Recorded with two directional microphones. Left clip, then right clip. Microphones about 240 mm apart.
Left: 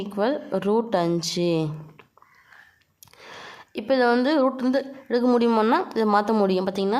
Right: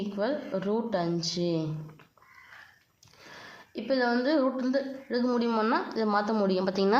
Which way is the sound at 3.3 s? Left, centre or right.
Left.